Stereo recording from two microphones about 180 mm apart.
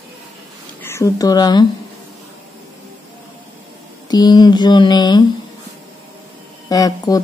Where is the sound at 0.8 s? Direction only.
15° left (ahead or behind).